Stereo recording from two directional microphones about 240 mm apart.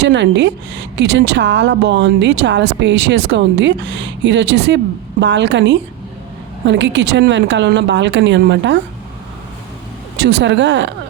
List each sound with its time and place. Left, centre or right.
0.0 s a woman's voice: right
10.2 s a woman's voice: right